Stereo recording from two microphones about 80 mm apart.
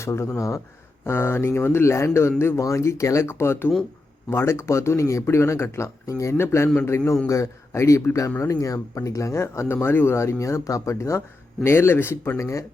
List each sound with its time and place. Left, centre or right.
0.0 s speech: left
11.6 s speech: left